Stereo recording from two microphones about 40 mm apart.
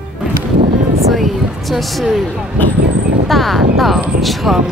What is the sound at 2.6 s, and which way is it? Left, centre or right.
Speech, left.